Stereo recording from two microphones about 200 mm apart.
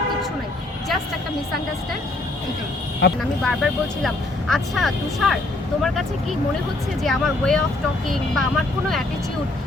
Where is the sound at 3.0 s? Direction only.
55° left (ahead or behind).